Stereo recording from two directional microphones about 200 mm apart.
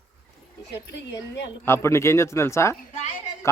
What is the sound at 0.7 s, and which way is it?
Speech, 60° left (ahead or behind).